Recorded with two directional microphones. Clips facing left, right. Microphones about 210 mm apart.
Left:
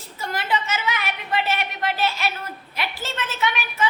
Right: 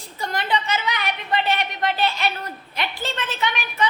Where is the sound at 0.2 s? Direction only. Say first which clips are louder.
Right 1 dB; 5° left (ahead or behind).